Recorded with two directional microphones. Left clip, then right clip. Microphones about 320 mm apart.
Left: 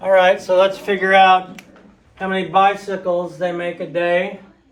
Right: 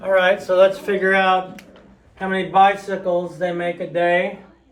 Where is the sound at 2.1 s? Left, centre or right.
Centre.